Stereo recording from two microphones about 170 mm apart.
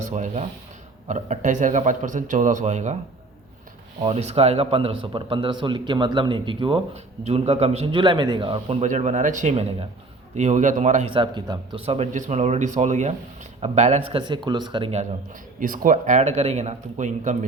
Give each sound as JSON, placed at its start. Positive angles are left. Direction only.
{"t": 0.0, "sound": "a man's voice", "side_deg": -45}
{"t": 4.0, "sound": "speech", "side_deg": -40}
{"t": 8.8, "sound": "a man's voice", "side_deg": -45}
{"t": 11.1, "sound": "speech", "side_deg": -30}